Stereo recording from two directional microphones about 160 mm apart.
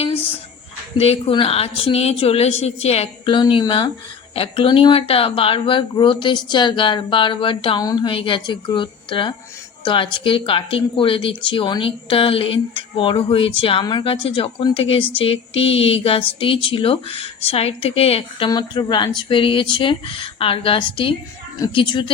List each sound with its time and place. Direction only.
0.9 s speech: 40° left (ahead or behind)